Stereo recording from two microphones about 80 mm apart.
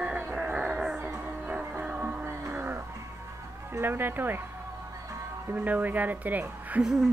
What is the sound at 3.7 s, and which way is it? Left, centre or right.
Speech, right.